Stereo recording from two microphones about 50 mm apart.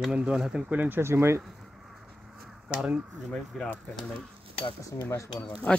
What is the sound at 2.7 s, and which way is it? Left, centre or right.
Speech, right.